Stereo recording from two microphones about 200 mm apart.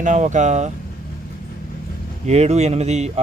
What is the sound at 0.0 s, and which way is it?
Speech, 35° right (ahead or behind).